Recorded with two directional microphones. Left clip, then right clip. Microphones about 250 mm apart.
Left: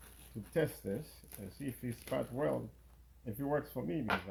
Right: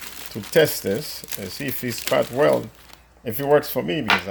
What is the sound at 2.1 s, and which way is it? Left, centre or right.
Speech, right.